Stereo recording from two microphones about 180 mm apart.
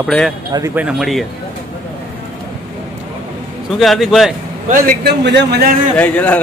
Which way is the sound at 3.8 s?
Centre (ahead or behind).